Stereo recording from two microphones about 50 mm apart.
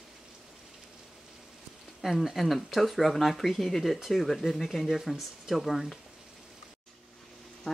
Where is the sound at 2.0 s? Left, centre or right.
Centre.